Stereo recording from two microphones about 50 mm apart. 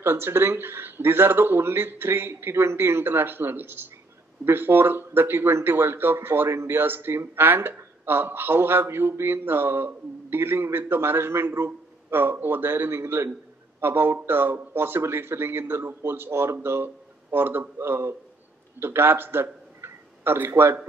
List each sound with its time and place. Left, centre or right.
0.0 s a man's voice: right
6.5 s speech: right
6.8 s a man's voice: right
13.7 s a man's voice: right